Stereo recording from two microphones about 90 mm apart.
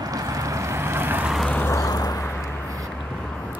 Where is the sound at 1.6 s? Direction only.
35° left (ahead or behind).